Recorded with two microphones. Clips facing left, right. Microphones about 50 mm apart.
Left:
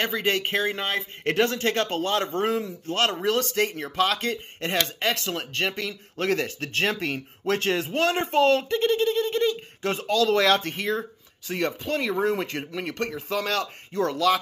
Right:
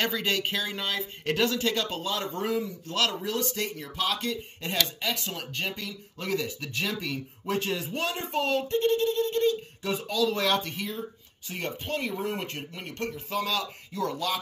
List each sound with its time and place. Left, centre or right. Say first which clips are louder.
0.0 s speech: left 3 dB; left
3.3 s speech: left 7 dB; left
5.4 s speech: left 6 dB; left